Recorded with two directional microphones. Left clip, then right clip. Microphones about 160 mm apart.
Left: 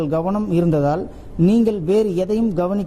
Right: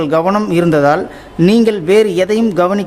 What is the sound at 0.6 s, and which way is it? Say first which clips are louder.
Speech: right 8 dB; 20° right (ahead or behind).